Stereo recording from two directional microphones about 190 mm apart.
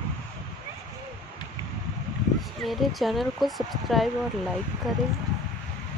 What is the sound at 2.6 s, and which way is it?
Speech, centre (ahead or behind).